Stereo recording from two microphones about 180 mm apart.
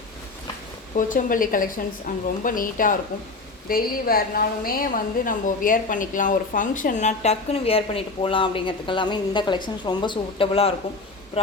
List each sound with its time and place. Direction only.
0.9 s a woman's voice: 50° left (ahead or behind); by 10.8 s 35° left (ahead or behind)